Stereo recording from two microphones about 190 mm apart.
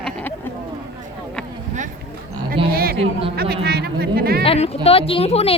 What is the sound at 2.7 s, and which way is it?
A woman's voice, 50° right (ahead or behind).